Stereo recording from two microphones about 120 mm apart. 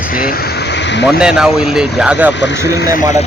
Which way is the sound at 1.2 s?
5° right (ahead or behind).